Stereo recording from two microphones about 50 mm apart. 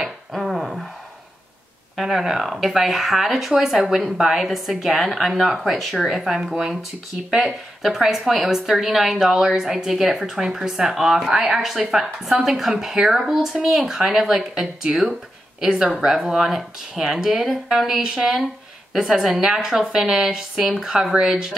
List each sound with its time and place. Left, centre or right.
0.0 s a sound: centre
2.0 s a woman's voice: centre
14.8 s a woman's voice: centre